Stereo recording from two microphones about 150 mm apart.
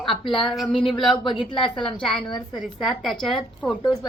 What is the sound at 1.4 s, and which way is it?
Speech, 35° left (ahead or behind).